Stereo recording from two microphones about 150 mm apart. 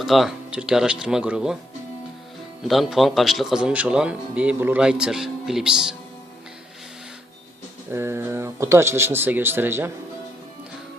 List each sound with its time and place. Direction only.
0.0 s speech: centre (ahead or behind)
2.6 s speech: centre (ahead or behind)
7.9 s speech: 15° right (ahead or behind)